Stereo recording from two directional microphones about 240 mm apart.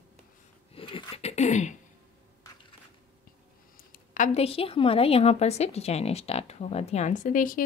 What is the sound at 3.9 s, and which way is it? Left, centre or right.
A woman's voice, left.